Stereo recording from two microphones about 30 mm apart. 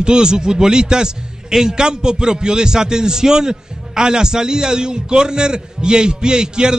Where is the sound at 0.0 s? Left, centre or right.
Right.